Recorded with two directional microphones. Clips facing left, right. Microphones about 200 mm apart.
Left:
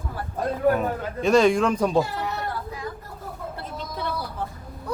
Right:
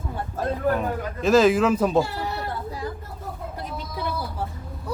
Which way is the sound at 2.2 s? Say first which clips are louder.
Even; 30° right (ahead or behind).